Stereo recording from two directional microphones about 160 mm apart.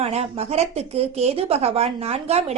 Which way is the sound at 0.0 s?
40° right (ahead or behind).